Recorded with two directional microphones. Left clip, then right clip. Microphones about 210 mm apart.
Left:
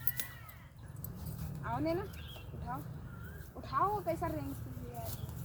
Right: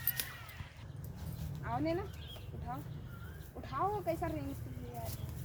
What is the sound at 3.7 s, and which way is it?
Speech, 10° left (ahead or behind).